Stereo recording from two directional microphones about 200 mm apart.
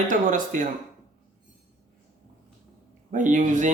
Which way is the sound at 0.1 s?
40° right (ahead or behind).